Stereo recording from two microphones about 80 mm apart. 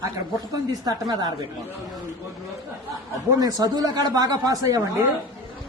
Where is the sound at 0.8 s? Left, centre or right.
Right.